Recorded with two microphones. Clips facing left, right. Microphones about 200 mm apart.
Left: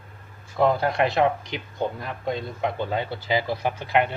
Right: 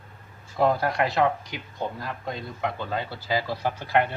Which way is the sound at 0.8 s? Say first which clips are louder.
Left 2 dB; 25° left (ahead or behind).